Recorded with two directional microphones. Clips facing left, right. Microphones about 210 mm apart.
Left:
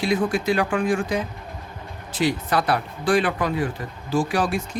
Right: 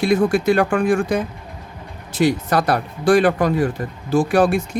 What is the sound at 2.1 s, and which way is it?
Speech, 45° right (ahead or behind).